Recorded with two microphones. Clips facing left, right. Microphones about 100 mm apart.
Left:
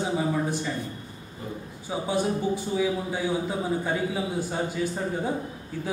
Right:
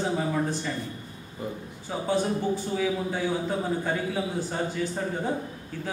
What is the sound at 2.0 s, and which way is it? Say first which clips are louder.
A man's voice: even; 15° left (ahead or behind).